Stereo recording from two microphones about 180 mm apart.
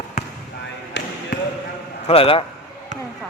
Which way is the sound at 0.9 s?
80° left.